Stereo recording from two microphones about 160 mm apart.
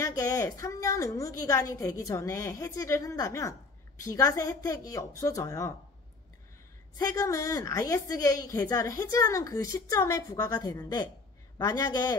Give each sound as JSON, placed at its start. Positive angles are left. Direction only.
{"t": 0.0, "sound": "a woman's voice", "side_deg": 20}
{"t": 7.0, "sound": "a woman's voice", "side_deg": 20}